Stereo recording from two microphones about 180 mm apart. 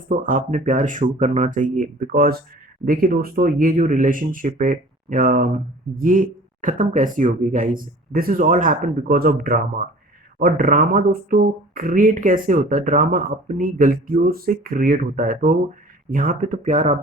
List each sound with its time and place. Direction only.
0.1 s speech: 50° right (ahead or behind)